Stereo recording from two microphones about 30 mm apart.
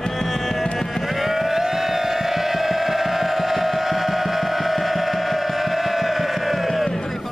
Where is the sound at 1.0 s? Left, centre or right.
Centre.